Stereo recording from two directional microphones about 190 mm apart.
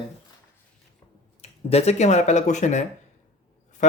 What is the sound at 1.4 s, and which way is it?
Speech, 35° left (ahead or behind).